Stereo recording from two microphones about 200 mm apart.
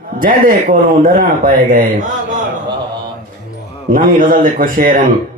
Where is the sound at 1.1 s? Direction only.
40° right (ahead or behind).